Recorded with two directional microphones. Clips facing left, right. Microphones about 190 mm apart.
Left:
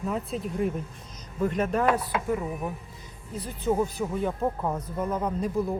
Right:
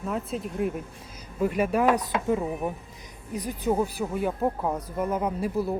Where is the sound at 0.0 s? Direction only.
Centre (ahead or behind).